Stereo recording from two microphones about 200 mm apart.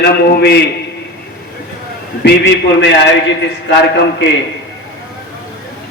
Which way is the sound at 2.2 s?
65° left (ahead or behind).